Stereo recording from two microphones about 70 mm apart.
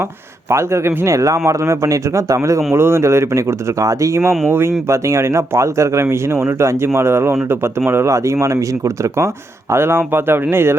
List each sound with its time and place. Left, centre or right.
0.5 s speech: right